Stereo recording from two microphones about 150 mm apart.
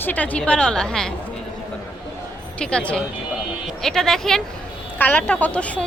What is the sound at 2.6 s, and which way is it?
A woman's voice, 5° left (ahead or behind).